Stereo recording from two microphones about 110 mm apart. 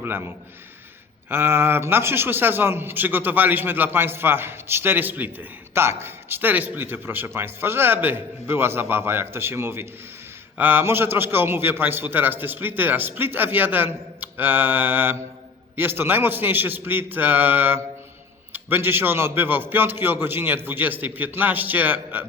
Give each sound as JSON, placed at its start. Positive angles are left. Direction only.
{"t": 0.0, "sound": "a man's voice", "side_deg": -20}
{"t": 1.3, "sound": "a man's voice", "side_deg": -20}